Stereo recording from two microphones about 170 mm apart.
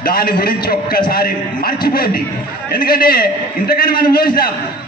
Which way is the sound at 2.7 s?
60° left (ahead or behind).